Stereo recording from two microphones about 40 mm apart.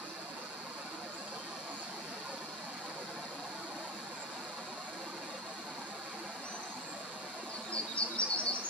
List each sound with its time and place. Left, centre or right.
7.7 s bird vocalization: left